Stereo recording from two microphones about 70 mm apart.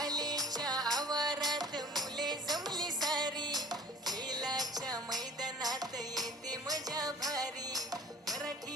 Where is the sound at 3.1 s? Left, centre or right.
Right.